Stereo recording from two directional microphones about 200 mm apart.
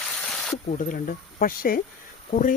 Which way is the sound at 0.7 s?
40° left (ahead or behind).